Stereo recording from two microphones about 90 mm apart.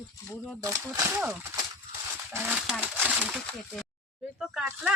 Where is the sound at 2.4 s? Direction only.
20° right (ahead or behind).